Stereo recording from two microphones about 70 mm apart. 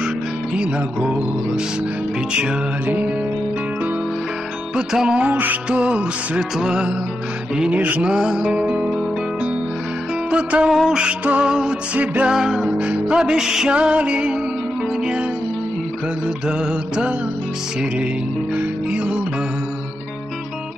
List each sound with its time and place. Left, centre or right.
0.6 s music: centre
2.3 s music: centre
4.7 s music: centre
10.7 s music: centre
12.3 s music: centre
12.6 s music: centre
16.4 s music: centre
18.5 s music: centre